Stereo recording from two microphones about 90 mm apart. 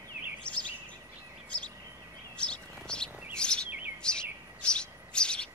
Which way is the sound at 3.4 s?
10° left (ahead or behind).